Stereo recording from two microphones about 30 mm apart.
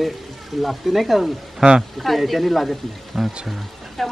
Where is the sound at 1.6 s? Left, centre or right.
Right.